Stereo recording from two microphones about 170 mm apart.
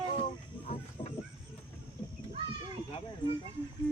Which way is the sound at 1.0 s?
30° left (ahead or behind).